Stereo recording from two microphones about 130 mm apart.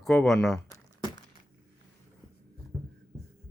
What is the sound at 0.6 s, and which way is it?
Crumpling, 25° left (ahead or behind).